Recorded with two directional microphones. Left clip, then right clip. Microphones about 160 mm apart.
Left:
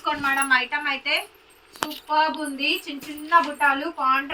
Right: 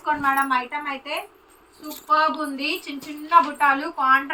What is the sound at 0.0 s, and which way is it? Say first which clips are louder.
A woman's voice: right 2 dB; 10° right (ahead or behind).